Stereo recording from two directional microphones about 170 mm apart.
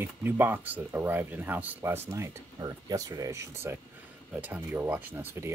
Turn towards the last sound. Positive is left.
turn(degrees=-15)  # may be behind; listen again after turning